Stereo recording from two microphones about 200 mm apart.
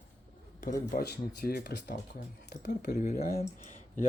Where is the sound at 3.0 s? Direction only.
45° left (ahead or behind).